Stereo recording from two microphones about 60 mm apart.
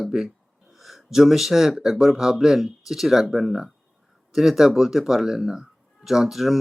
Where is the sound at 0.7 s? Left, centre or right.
Centre.